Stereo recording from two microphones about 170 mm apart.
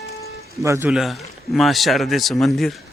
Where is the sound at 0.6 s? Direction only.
15° right (ahead or behind).